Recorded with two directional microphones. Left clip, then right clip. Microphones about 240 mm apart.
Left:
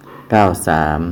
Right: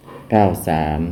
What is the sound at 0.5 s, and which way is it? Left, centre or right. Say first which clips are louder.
Speech: left 5 dB; centre.